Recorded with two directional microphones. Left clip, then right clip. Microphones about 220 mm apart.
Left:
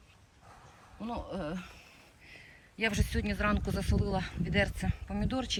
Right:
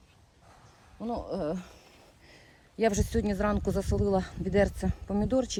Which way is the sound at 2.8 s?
15° right (ahead or behind).